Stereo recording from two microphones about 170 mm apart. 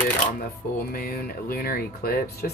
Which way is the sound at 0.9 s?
60° left (ahead or behind).